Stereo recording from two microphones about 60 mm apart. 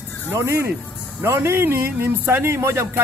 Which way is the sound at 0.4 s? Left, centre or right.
Right.